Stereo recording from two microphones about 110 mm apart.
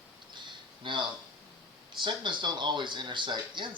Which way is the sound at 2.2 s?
45° right (ahead or behind).